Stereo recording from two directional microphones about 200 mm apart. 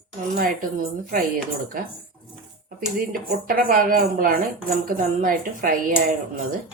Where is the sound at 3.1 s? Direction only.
45° right (ahead or behind).